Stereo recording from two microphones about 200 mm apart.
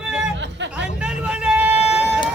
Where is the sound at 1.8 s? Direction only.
30° left (ahead or behind).